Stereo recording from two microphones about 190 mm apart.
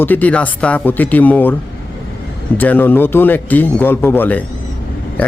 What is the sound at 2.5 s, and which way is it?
A man's voice, 10° left (ahead or behind).